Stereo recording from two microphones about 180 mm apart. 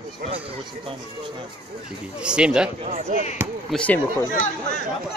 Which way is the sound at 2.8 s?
35° right (ahead or behind).